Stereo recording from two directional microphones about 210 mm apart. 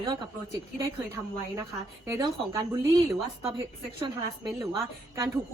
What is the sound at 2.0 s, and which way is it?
Speech, 15° right (ahead or behind).